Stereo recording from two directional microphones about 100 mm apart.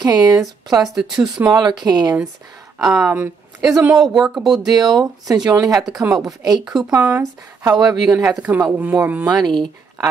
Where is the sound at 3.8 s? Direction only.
5° right (ahead or behind).